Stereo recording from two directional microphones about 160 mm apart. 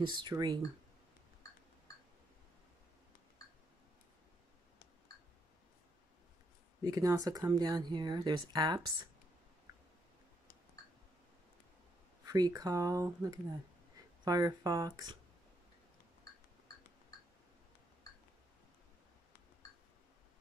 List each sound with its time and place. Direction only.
0.0 s speech: 30° right (ahead or behind)
6.8 s speech: 20° right (ahead or behind)
12.3 s speech: 25° right (ahead or behind)